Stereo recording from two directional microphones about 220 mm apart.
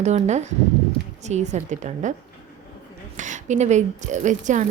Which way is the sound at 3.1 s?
35° right (ahead or behind).